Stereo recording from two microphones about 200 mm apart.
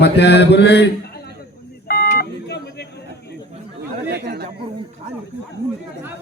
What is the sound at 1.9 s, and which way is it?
Telephone dialing, 50° left (ahead or behind).